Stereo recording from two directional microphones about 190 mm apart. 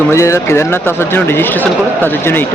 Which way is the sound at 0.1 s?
15° left (ahead or behind).